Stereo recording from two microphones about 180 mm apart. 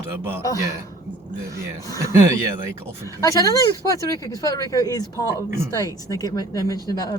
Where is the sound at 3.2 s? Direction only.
20° left (ahead or behind).